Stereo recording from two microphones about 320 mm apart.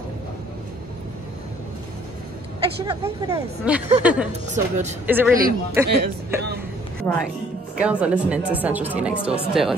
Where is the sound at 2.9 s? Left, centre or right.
Centre.